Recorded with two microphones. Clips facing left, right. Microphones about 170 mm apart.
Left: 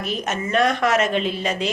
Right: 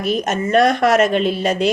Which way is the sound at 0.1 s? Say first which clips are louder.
Right 7 dB; 40° right (ahead or behind).